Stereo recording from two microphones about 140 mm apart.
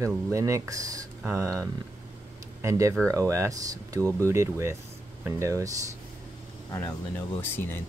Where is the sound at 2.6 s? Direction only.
20° right (ahead or behind).